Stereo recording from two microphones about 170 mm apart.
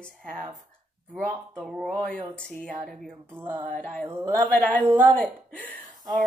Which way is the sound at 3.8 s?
5° left (ahead or behind).